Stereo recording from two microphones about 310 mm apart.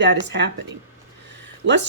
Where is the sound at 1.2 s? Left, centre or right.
Right.